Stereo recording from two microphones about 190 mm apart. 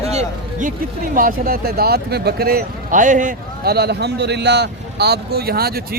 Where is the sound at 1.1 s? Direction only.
50° right (ahead or behind).